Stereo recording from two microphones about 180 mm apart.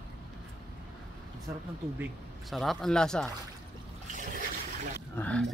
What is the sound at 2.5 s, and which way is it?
Speech, centre (ahead or behind).